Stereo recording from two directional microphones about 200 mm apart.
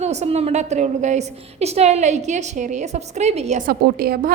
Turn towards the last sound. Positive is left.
turn(degrees=-50)  # may be behind; listen again after turning